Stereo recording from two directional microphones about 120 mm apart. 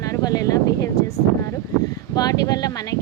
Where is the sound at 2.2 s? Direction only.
30° left (ahead or behind).